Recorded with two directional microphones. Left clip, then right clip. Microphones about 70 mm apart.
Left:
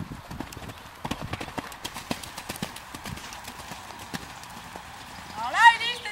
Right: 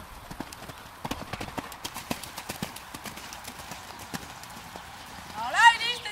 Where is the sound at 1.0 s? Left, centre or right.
Centre.